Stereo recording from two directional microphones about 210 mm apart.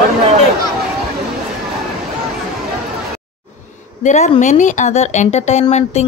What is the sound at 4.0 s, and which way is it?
Speech, 35° left (ahead or behind).